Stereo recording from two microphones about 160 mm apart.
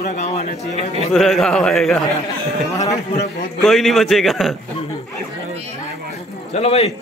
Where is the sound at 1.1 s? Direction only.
Centre (ahead or behind).